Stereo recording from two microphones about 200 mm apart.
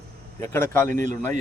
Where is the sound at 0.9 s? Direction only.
40° right (ahead or behind).